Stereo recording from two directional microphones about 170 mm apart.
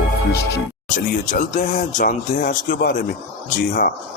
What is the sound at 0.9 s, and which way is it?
Speech, 50° left (ahead or behind).